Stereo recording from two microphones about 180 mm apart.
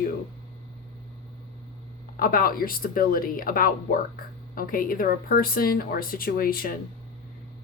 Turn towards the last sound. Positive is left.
turn(degrees=55)  # may be behind; listen again after turning